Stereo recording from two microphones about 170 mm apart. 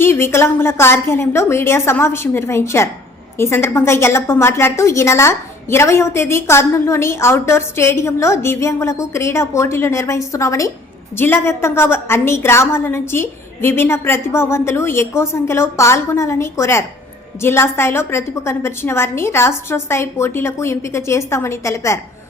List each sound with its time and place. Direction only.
0.0 s a woman's voice: 15° left (ahead or behind)